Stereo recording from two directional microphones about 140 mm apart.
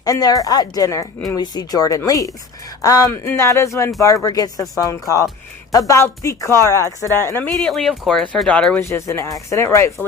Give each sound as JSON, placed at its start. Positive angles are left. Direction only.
{"t": 0.0, "sound": "speech", "side_deg": 25}
{"t": 7.7, "sound": "speech", "side_deg": 0}
{"t": 8.8, "sound": "speech", "side_deg": 20}